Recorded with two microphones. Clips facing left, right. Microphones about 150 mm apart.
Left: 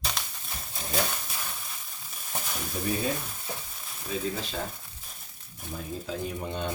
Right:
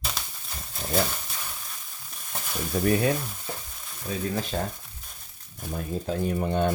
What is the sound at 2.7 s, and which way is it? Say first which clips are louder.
Speech: right 8 dB; 65° right (ahead or behind).